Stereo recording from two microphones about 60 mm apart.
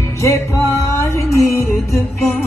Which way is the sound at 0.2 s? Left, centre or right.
Left.